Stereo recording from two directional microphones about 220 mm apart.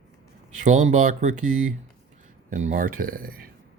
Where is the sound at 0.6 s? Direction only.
35° right (ahead or behind).